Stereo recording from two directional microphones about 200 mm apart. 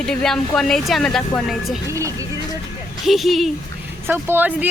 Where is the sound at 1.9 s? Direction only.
15° right (ahead or behind).